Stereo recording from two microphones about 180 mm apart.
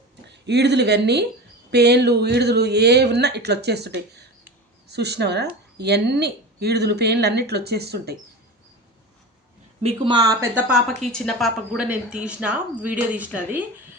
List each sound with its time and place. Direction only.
0.3 s speech: 70° right (ahead or behind)
9.8 s speech: 25° right (ahead or behind)
10.5 s speech: centre (ahead or behind)